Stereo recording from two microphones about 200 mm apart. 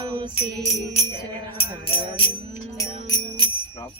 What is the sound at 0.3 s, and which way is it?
Music, 35° left (ahead or behind).